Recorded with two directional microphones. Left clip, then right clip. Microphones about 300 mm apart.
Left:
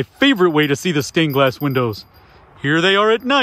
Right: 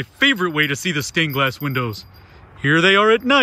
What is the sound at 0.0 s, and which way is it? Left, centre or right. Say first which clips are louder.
Speech: left 3 dB; centre.